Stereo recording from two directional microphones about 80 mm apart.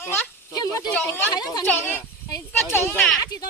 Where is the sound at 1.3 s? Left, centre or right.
Left.